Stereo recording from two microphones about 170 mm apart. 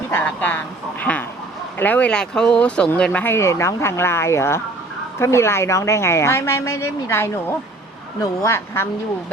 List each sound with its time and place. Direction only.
0.1 s speech: 10° left (ahead or behind)